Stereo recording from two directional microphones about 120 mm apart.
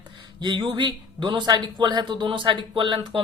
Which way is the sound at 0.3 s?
40° right (ahead or behind).